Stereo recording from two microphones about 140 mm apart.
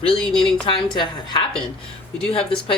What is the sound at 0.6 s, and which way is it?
Speech, 35° left (ahead or behind).